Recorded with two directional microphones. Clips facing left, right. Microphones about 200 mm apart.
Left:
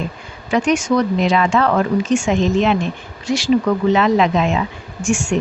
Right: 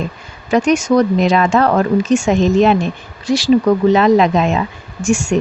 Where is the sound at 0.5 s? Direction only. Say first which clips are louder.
Right 4 dB; 40° right (ahead or behind).